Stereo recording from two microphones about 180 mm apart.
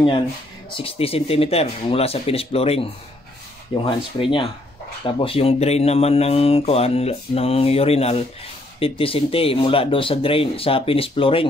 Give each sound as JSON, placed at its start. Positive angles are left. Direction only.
{"t": 0.7, "sound": "speech", "side_deg": 30}